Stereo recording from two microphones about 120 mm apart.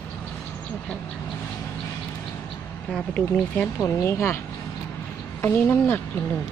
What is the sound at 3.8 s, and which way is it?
Speech, 25° left (ahead or behind).